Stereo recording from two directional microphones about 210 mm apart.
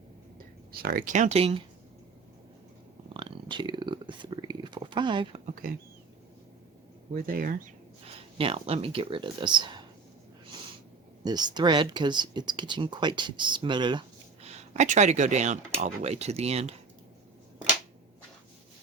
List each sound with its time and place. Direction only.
0.7 s speech: 45° right (ahead or behind); by 1.6 s 30° right (ahead or behind)
3.1 s a sound: 25° right (ahead or behind)
7.1 s speech: 40° right (ahead or behind)
8.0 s speech: 25° right (ahead or behind)
11.2 s speech: 20° right (ahead or behind)
14.4 s speech: 30° right (ahead or behind)